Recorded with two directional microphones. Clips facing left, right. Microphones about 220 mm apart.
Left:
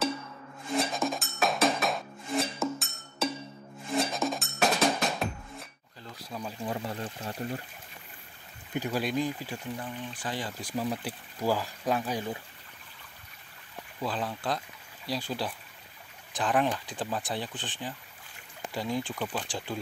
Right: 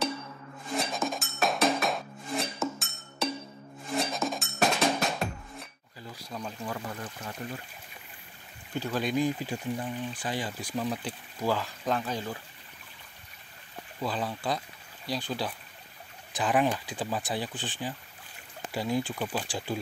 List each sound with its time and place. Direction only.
0.7 s music: centre (ahead or behind)
6.6 s speech: 30° left (ahead or behind)
8.7 s speech: 15° left (ahead or behind)
9.2 s speech: 20° right (ahead or behind)
10.6 s speech: 5° left (ahead or behind)
14.0 s speech: centre (ahead or behind)